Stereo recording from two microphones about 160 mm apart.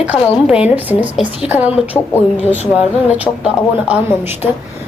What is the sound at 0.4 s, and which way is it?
Speech, 5° right (ahead or behind).